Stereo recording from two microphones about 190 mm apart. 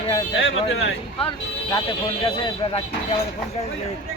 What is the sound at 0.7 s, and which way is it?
Speech, 80° left.